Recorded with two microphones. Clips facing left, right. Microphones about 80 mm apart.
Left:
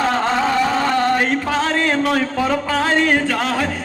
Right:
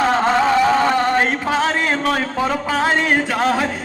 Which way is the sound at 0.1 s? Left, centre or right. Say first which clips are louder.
Right 2 dB; centre.